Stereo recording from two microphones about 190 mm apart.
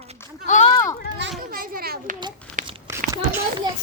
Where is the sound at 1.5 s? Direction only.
50° right (ahead or behind).